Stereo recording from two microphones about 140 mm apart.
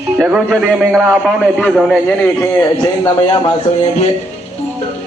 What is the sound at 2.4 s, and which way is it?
Speech, 20° left (ahead or behind).